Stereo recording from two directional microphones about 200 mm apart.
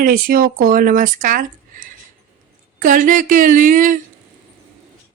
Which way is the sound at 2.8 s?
40° right (ahead or behind).